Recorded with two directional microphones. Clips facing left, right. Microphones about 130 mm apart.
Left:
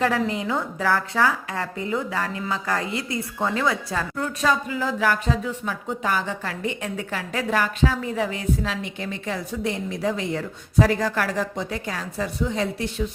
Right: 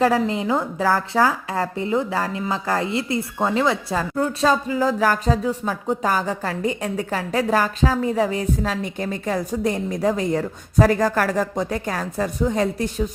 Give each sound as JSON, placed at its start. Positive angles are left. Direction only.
{"t": 0.0, "sound": "a woman's voice", "side_deg": -30}